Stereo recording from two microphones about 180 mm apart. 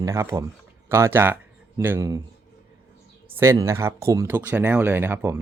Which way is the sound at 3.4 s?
15° right (ahead or behind).